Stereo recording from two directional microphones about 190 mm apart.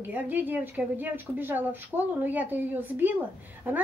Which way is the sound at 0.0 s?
10° right (ahead or behind).